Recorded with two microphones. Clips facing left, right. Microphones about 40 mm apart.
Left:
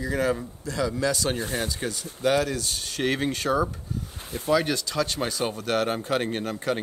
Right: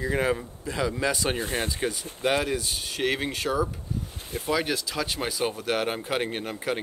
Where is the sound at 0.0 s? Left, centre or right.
Right.